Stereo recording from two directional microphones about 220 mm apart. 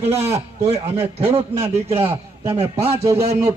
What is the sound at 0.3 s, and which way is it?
Speech, 30° right (ahead or behind).